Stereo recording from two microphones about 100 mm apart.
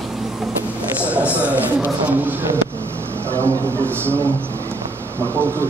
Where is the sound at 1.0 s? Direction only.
15° right (ahead or behind).